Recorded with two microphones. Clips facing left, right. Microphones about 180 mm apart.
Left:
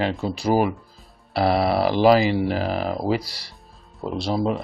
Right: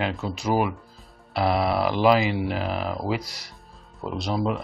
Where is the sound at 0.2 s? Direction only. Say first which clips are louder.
Left 4 dB; 35° left (ahead or behind).